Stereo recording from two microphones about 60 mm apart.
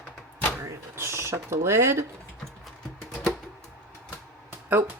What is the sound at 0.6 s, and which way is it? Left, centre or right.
Speech, right.